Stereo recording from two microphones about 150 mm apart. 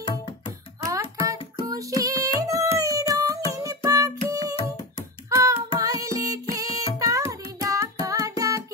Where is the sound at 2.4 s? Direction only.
20° right (ahead or behind).